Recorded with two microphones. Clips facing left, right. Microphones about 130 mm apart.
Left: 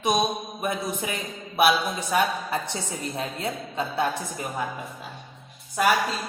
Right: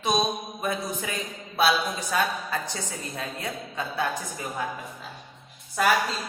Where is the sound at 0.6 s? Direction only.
20° left (ahead or behind).